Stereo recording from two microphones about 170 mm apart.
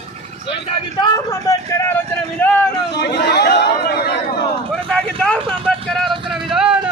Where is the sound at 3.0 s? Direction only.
75° left (ahead or behind).